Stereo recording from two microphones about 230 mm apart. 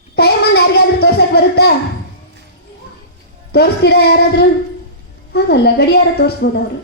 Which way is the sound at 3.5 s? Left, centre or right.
Left.